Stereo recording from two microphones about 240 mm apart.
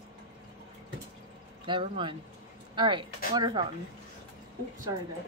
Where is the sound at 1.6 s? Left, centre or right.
Right.